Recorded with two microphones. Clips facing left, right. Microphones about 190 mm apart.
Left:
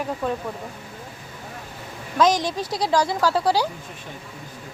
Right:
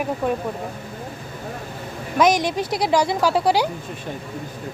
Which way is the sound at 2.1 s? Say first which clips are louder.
Right 2 dB; 15° right (ahead or behind).